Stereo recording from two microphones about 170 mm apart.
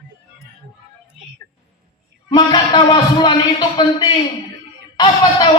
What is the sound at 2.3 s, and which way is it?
A man's voice, 25° left (ahead or behind).